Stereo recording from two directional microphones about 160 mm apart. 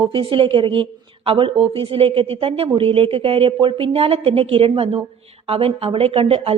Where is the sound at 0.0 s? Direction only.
30° right (ahead or behind).